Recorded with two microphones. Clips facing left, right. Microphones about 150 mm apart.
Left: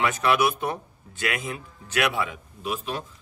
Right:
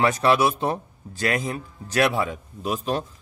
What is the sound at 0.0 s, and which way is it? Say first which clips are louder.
A man's voice: right 3 dB; 35° right (ahead or behind).